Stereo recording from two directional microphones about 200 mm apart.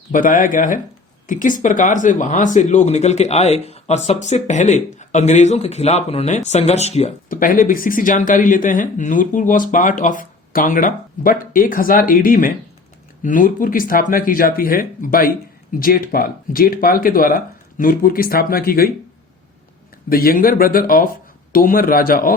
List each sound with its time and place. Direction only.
0.1 s speech: 40° left (ahead or behind)
20.1 s speech: 45° left (ahead or behind)